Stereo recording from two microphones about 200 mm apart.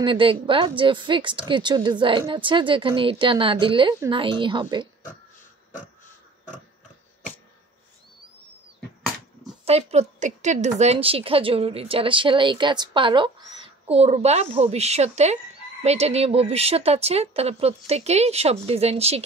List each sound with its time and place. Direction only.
0.0 s a woman's voice: 25° right (ahead or behind)
9.7 s a woman's voice: 30° right (ahead or behind)